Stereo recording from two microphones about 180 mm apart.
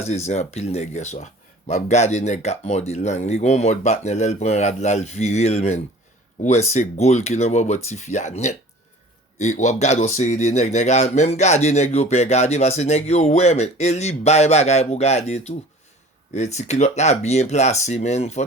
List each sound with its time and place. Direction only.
0.0 s speech: 35° left (ahead or behind)